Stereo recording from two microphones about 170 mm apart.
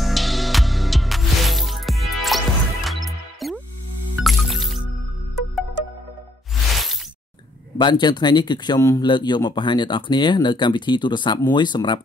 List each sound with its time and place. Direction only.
0.0 s music: centre (ahead or behind)
6.5 s music: centre (ahead or behind)
7.7 s speech: 25° left (ahead or behind)